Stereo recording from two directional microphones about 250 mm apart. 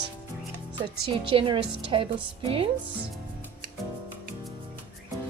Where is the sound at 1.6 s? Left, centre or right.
Right.